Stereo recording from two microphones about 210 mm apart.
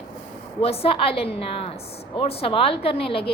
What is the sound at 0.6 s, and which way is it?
A woman's voice, 30° left (ahead or behind).